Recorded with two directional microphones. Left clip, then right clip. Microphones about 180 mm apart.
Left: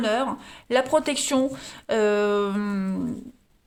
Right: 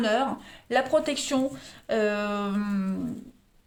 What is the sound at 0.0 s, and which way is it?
Speech, 30° left (ahead or behind).